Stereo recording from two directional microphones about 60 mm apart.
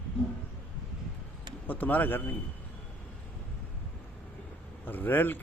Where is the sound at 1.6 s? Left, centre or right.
Left.